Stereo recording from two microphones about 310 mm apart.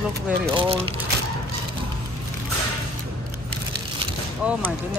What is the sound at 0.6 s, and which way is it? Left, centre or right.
Speech, centre.